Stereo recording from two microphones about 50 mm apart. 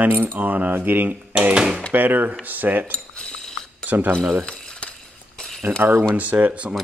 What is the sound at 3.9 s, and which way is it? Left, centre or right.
Speech, right.